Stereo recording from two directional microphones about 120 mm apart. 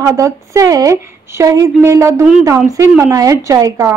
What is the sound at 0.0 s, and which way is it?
A woman's voice, 25° right (ahead or behind).